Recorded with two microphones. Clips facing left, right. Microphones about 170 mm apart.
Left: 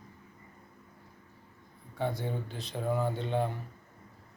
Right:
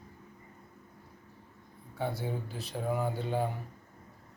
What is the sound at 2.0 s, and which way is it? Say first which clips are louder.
Speech: left 1 dB; 5° right (ahead or behind).